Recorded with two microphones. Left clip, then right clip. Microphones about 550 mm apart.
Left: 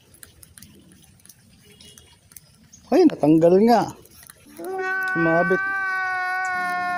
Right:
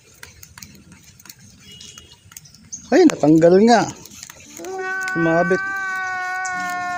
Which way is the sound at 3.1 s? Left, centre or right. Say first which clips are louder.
Right 3 dB; left.